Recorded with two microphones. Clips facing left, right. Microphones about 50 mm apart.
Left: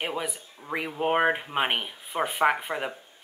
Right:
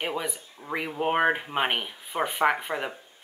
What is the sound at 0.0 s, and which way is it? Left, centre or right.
Speech, centre.